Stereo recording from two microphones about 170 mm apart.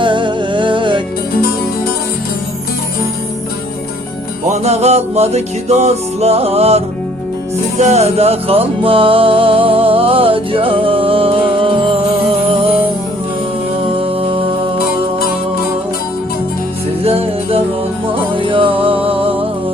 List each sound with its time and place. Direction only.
0.0 s music: 30° right (ahead or behind)
1.3 s music: 65° left (ahead or behind)
4.4 s music: 40° right (ahead or behind)
13.9 s music: 35° right (ahead or behind)
17.0 s music: 35° right (ahead or behind)